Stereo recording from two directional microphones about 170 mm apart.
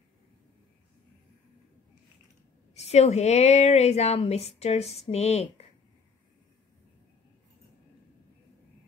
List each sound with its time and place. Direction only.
2.7 s a woman's voice: 40° left (ahead or behind)